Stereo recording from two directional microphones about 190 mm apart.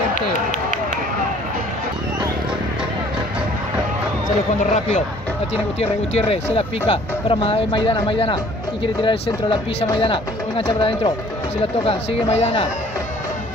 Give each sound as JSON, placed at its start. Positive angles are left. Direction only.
{"t": 0.1, "sound": "run", "side_deg": 45}
{"t": 5.8, "sound": "speech", "side_deg": 35}